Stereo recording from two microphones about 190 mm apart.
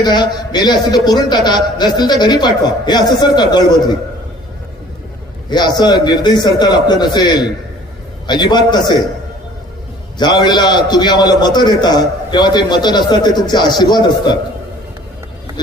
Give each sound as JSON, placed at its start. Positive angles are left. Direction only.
{"t": 0.0, "sound": "a man's voice", "side_deg": 20}
{"t": 5.5, "sound": "a man's voice", "side_deg": 25}
{"t": 10.2, "sound": "a man's voice", "side_deg": 25}